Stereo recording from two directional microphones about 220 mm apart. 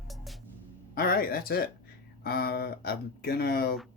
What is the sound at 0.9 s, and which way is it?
Speech, 40° left (ahead or behind).